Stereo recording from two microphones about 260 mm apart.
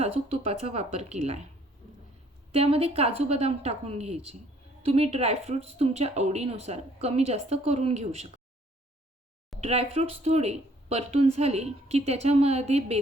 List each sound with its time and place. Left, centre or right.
0.0 s speech: right
2.5 s speech: right
9.6 s speech: right